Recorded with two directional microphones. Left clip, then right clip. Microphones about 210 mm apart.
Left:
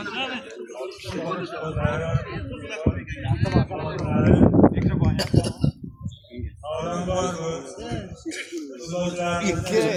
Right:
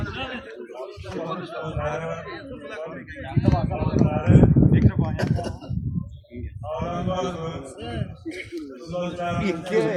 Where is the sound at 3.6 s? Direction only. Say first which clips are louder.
Right 2 dB; 50° right (ahead or behind).